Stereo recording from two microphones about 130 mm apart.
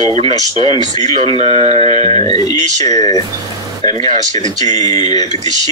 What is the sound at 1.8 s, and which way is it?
Speech, 35° left (ahead or behind).